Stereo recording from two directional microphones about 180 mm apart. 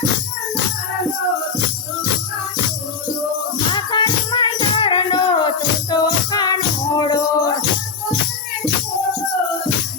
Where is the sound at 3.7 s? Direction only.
25° left (ahead or behind).